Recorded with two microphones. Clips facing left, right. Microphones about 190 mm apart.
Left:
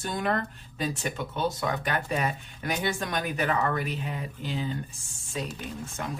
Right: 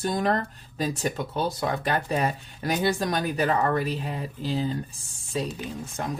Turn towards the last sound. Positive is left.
turn(degrees=-35)  # may be behind; listen again after turning